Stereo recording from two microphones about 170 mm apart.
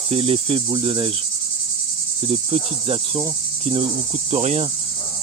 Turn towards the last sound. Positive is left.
turn(degrees=-40)  # may be behind; listen again after turning